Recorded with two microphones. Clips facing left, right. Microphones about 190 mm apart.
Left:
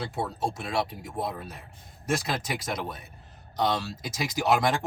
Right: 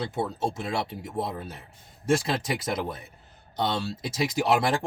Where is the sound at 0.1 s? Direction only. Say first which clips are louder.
Right 2 dB; 25° right (ahead or behind).